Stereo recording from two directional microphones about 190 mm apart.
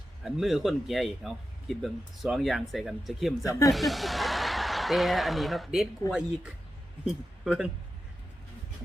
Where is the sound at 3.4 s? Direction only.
15° left (ahead or behind).